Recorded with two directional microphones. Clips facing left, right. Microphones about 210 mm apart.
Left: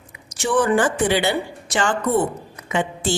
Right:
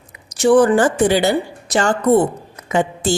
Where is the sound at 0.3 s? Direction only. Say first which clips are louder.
Right 7 dB; 40° right (ahead or behind).